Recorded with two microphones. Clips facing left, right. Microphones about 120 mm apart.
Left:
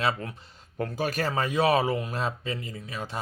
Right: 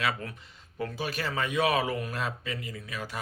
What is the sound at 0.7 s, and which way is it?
Speech, 45° left (ahead or behind).